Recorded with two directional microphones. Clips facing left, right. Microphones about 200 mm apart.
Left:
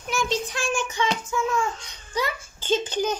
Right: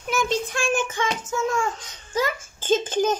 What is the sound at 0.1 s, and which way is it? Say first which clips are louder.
Child singing: right 2 dB; 55° right (ahead or behind).